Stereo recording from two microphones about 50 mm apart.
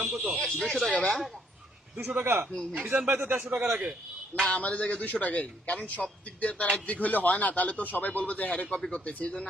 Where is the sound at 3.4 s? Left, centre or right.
Centre.